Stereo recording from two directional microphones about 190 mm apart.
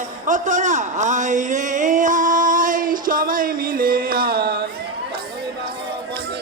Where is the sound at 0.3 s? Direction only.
40° right (ahead or behind); by 4.7 s 55° right (ahead or behind).